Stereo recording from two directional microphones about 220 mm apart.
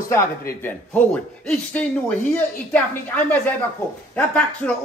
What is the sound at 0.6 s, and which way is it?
Speech, 10° left (ahead or behind).